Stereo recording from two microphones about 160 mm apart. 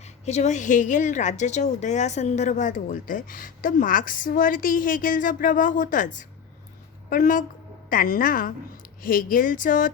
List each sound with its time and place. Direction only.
0.0 s a woman's voice: 45° left (ahead or behind)